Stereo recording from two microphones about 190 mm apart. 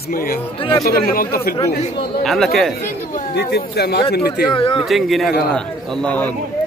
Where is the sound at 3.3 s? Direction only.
60° left (ahead or behind).